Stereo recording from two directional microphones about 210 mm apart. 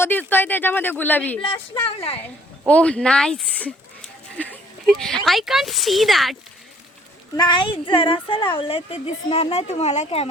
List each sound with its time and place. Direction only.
0.0 s speech: 10° left (ahead or behind)
2.6 s speech: 5° left (ahead or behind)
7.3 s speech: 20° left (ahead or behind)